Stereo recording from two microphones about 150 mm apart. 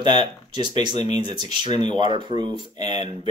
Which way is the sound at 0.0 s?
30° right (ahead or behind).